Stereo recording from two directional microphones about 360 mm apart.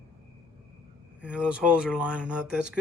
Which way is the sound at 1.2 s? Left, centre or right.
Centre.